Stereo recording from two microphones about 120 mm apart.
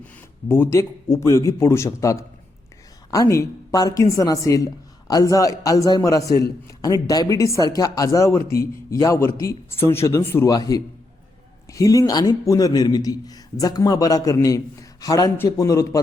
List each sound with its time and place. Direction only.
0.0 s a woman's voice: 15° left (ahead or behind)